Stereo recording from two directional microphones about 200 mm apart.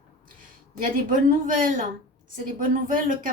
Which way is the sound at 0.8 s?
40° right (ahead or behind).